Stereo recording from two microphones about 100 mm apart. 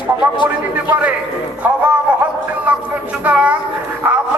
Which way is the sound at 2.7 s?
15° right (ahead or behind).